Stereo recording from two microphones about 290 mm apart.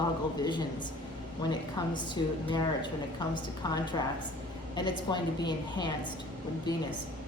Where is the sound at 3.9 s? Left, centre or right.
Centre.